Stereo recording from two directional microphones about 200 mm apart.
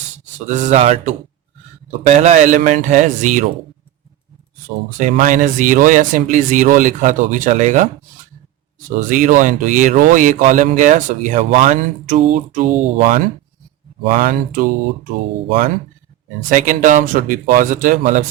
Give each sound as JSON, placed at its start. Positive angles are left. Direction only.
{"t": 0.4, "sound": "speech", "side_deg": -35}
{"t": 4.9, "sound": "speech", "side_deg": -40}
{"t": 9.0, "sound": "speech", "side_deg": -40}
{"t": 16.5, "sound": "speech", "side_deg": -40}